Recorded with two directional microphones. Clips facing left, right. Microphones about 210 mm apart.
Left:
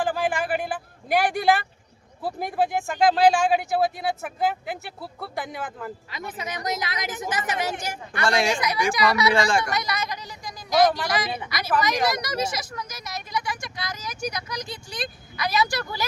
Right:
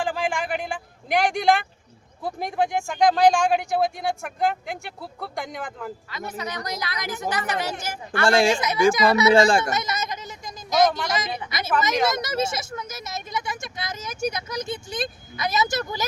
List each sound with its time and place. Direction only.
0.0 s a sound: 5° left (ahead or behind)
2.2 s speech: 5° left (ahead or behind)
6.3 s a woman's voice: 20° left (ahead or behind)
8.3 s speech: 30° right (ahead or behind)